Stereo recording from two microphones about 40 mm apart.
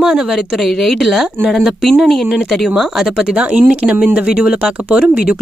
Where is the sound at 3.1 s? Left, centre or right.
Right.